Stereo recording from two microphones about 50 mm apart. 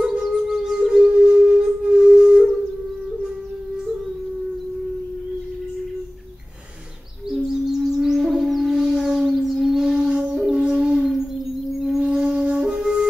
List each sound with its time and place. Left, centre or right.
0.0 s music: centre
7.2 s wind instrument: centre
10.7 s howl: centre
11.8 s flute: centre